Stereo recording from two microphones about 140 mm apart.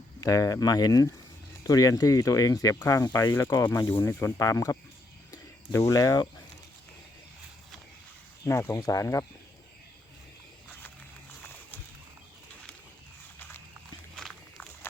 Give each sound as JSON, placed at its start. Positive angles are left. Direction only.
{"t": 0.2, "sound": "speech", "side_deg": 25}
{"t": 5.3, "sound": "a sound", "side_deg": 25}
{"t": 8.4, "sound": "speech", "side_deg": 20}
{"t": 14.2, "sound": "walk", "side_deg": 5}